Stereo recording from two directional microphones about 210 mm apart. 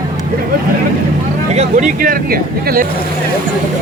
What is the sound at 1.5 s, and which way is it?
Speech, 40° right (ahead or behind).